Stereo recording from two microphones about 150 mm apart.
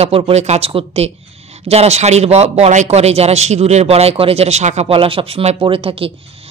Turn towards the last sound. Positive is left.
turn(degrees=-40)  # may be behind; listen again after turning